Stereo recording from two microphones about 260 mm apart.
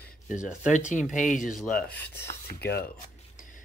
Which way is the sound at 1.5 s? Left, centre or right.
Centre.